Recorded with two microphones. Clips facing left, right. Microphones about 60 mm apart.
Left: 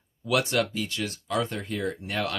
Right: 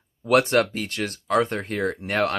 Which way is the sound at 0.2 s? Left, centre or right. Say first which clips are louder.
Right 6 dB; right.